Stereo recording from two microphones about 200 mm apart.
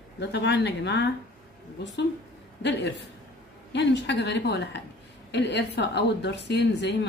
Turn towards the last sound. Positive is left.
turn(degrees=55)  # may be behind; listen again after turning